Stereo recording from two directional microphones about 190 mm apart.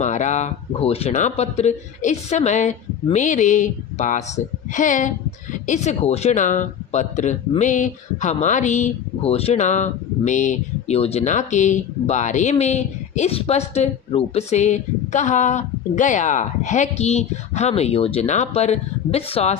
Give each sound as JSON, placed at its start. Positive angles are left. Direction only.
{"t": 0.0, "sound": "speech", "side_deg": 40}